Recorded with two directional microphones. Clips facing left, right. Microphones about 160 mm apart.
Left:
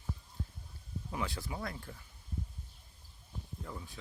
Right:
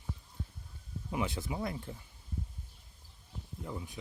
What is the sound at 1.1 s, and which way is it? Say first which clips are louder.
Speech: right 4 dB; 20° right (ahead or behind).